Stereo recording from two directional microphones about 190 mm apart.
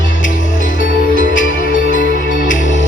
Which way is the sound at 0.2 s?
45° left (ahead or behind).